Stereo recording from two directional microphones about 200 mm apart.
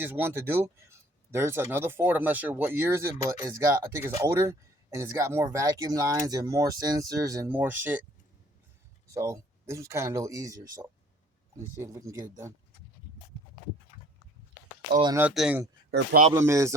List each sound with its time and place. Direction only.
0.0 s speech: 10° right (ahead or behind)
9.1 s speech: 15° right (ahead or behind)
11.8 s speech: 15° right (ahead or behind)
15.0 s a man's voice: 15° right (ahead or behind)